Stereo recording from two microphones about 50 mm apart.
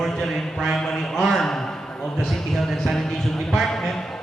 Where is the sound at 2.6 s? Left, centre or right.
Centre.